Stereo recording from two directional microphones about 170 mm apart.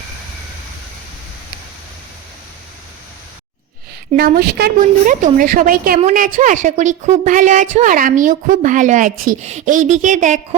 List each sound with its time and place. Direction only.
4.2 s a woman's voice: 65° right (ahead or behind)
5.0 s a woman's voice: 55° right (ahead or behind)